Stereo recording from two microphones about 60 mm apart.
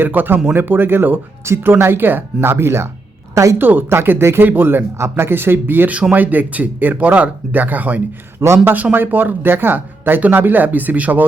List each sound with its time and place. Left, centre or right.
0.0 s speech: right
1.5 s speech: right
1.8 s speech: right
3.3 s a woman's voice: right
3.6 s speech: right
4.9 s speech: right
5.3 s speech: right
6.0 s speech: right